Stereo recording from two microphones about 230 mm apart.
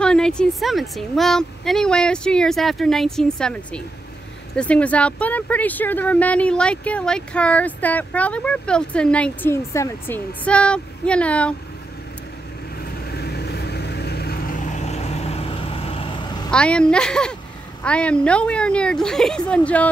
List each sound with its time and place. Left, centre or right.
0.0 s speech: centre
13.1 s vehicle: left; by 16.4 s centre
16.4 s speech: centre